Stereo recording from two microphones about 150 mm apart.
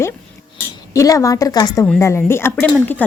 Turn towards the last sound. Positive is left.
turn(degrees=10)  # may be behind; listen again after turning